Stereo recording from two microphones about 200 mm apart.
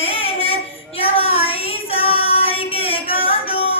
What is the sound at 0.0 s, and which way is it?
Child singing, 30° left (ahead or behind).